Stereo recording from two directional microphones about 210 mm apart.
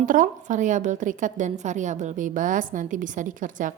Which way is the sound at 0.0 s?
40° right (ahead or behind).